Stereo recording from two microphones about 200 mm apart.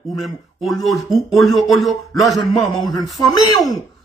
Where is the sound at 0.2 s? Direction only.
Centre (ahead or behind).